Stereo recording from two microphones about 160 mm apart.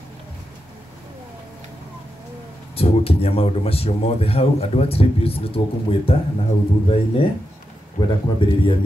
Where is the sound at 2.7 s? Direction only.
40° left (ahead or behind).